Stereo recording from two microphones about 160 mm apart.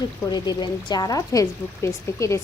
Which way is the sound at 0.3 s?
25° left (ahead or behind).